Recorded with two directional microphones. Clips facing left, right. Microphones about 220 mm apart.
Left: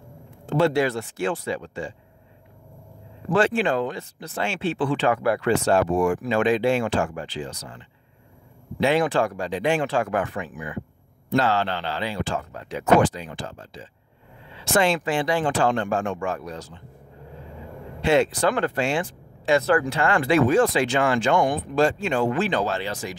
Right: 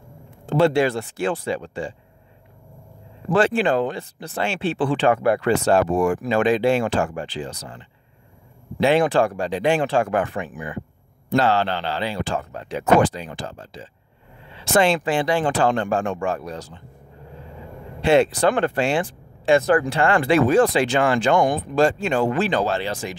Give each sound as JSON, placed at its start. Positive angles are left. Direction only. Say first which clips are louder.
{"t": 0.5, "sound": "speech", "louder": "right 3 dB", "side_deg": -30}
{"t": 3.3, "sound": "speech", "louder": "right 2 dB", "side_deg": -35}
{"t": 5.4, "sound": "speech", "louder": "right 2 dB", "side_deg": -35}
{"t": 18.3, "sound": "speech", "louder": "right 3 dB", "side_deg": -30}